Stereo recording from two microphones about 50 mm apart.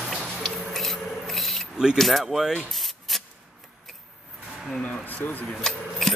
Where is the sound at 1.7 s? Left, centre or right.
Centre.